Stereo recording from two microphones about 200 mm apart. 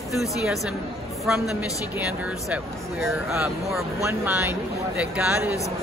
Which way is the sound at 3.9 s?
10° right (ahead or behind).